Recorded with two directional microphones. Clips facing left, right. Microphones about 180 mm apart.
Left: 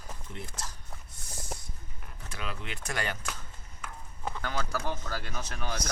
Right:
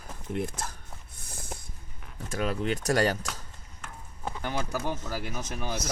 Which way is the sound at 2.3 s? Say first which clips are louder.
Right 11 dB; 45° right (ahead or behind).